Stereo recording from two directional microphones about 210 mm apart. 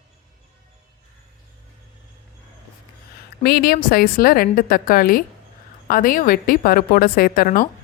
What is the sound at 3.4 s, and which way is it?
A woman's voice, 45° left (ahead or behind).